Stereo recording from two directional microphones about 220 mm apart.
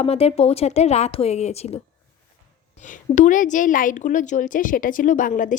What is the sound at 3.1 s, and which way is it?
Speech, 35° left (ahead or behind).